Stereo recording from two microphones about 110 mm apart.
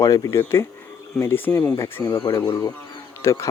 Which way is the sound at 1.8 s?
30° left (ahead or behind).